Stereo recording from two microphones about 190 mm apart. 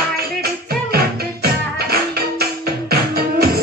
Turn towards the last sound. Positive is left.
turn(degrees=-55)  # may be behind; listen again after turning